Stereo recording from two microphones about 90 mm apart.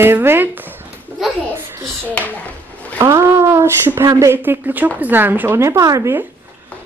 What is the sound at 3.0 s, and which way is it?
Speech, 35° right (ahead or behind).